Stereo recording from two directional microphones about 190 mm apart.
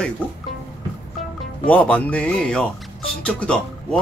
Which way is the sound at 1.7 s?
10° left (ahead or behind).